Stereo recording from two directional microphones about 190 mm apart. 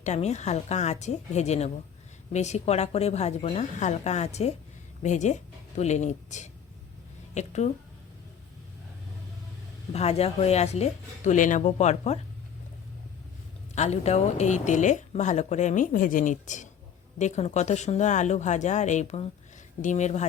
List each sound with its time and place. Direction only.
0.0 s speech: 35° left (ahead or behind)
9.9 s speech: 35° left (ahead or behind)
13.7 s speech: 35° left (ahead or behind)